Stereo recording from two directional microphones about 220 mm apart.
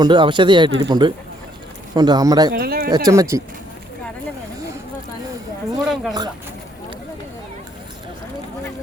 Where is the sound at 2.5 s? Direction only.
45° right (ahead or behind).